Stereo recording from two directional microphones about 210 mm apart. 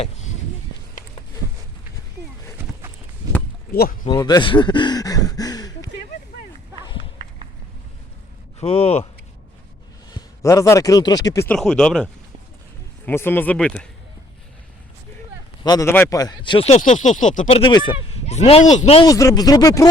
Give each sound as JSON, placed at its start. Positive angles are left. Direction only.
{"t": 3.2, "sound": "a sound", "side_deg": -20}
{"t": 3.7, "sound": "speech", "side_deg": 50}
{"t": 4.0, "sound": "a sound", "side_deg": 20}
{"t": 8.6, "sound": "speech", "side_deg": 30}
{"t": 10.1, "sound": "speech", "side_deg": 15}
{"t": 11.5, "sound": "speech", "side_deg": 5}
{"t": 13.1, "sound": "speech", "side_deg": 10}
{"t": 15.6, "sound": "speech", "side_deg": 15}
{"t": 17.6, "sound": "speech", "side_deg": 20}
{"t": 19.0, "sound": "speech", "side_deg": 15}